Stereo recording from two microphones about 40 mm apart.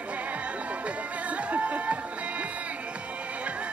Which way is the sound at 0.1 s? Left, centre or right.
Right.